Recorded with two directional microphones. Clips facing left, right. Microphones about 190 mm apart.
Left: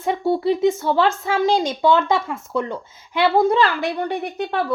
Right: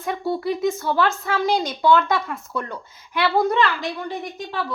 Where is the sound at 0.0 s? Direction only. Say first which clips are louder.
Left 5 dB; 25° left (ahead or behind).